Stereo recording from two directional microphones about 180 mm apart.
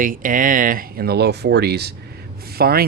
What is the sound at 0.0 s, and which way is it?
Speech, 50° right (ahead or behind).